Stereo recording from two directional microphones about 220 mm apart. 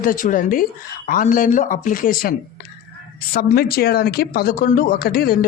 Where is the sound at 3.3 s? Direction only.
45° left (ahead or behind).